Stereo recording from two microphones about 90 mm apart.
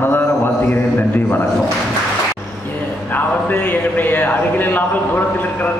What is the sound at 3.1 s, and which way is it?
Speech, 20° left (ahead or behind).